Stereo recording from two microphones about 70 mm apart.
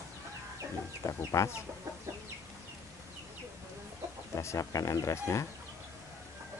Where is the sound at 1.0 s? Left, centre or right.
Left.